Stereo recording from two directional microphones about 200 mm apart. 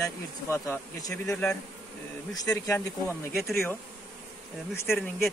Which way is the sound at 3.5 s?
Centre (ahead or behind).